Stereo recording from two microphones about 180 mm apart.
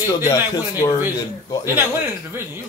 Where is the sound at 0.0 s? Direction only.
20° left (ahead or behind).